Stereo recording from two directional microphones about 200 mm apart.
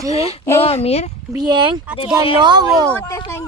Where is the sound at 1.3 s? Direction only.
20° right (ahead or behind).